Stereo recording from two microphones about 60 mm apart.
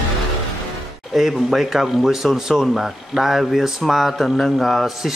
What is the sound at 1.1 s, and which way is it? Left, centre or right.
Speech, centre.